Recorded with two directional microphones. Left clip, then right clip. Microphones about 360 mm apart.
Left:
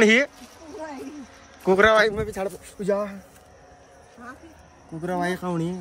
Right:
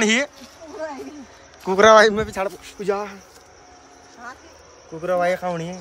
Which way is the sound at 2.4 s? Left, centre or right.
Centre.